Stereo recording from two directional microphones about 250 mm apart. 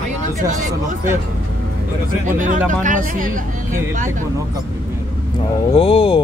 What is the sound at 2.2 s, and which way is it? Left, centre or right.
Speech, right.